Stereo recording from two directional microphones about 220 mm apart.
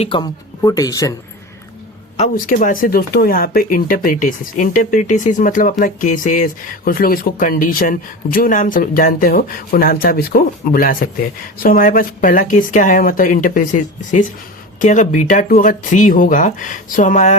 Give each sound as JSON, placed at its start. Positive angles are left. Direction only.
{"t": 0.0, "sound": "speech", "side_deg": 20}
{"t": 2.1, "sound": "speech", "side_deg": 35}